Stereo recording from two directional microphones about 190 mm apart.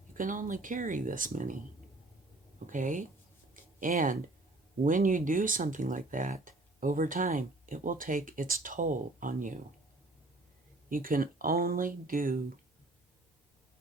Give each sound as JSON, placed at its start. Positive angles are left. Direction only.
{"t": 0.1, "sound": "speech", "side_deg": -45}
{"t": 2.6, "sound": "speech", "side_deg": -40}
{"t": 3.5, "sound": "a sound", "side_deg": -45}
{"t": 4.8, "sound": "speech", "side_deg": -45}
{"t": 10.8, "sound": "speech", "side_deg": -50}